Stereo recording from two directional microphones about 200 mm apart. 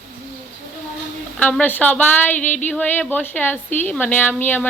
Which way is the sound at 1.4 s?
10° left (ahead or behind).